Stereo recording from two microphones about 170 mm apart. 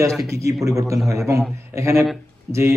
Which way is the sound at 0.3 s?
20° right (ahead or behind).